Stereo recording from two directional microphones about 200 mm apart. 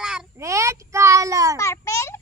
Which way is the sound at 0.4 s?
15° right (ahead or behind).